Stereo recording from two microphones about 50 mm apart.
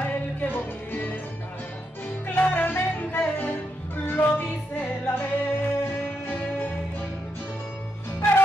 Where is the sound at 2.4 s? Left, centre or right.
Left.